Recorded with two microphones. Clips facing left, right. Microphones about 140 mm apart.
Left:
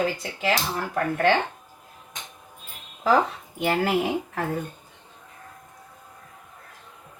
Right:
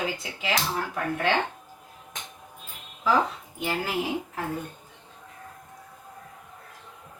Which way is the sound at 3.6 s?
65° left (ahead or behind).